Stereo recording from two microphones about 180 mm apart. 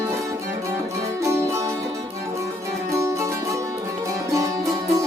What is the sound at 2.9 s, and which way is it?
Music, 15° right (ahead or behind).